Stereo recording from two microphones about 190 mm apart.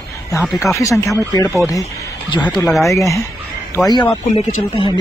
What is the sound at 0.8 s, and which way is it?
Speech, 15° left (ahead or behind).